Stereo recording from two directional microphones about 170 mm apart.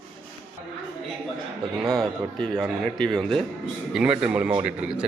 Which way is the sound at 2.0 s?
Centre (ahead or behind).